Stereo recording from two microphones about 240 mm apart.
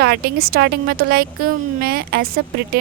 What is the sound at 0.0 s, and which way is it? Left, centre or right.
Speech, right.